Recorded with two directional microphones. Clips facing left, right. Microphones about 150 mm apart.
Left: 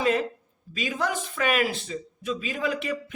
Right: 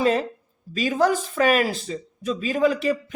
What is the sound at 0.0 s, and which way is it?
A man's voice, 35° right (ahead or behind).